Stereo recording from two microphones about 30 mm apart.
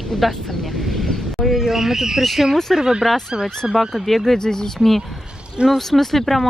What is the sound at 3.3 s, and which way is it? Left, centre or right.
Speech, right.